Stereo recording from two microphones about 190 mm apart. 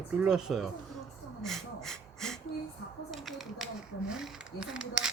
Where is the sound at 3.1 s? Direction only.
Centre (ahead or behind).